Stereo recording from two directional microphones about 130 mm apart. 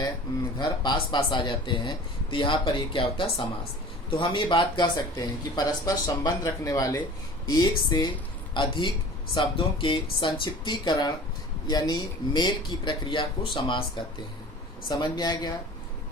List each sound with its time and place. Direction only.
0.6 s speech: 35° left (ahead or behind)